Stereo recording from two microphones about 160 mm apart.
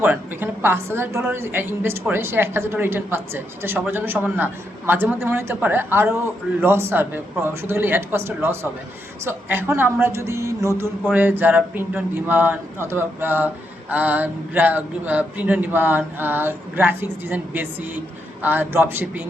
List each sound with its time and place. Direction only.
0.0 s a woman's voice: 15° right (ahead or behind)